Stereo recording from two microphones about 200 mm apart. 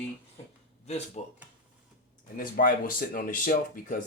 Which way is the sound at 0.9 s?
30° left (ahead or behind).